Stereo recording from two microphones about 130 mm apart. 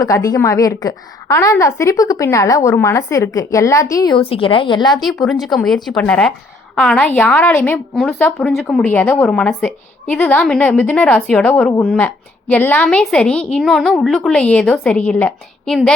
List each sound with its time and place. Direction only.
0.0 s a woman's voice: 25° left (ahead or behind)
4.1 s a woman's voice: 45° left (ahead or behind)
5.2 s a woman's voice: centre (ahead or behind)